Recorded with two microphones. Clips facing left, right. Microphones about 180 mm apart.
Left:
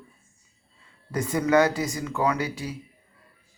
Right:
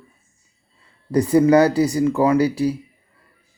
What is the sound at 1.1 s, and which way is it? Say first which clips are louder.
Speech: right 9 dB; 35° right (ahead or behind).